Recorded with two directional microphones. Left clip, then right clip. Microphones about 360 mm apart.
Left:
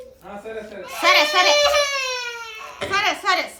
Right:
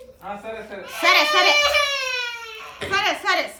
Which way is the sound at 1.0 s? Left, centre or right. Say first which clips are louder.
Left 1 dB; centre.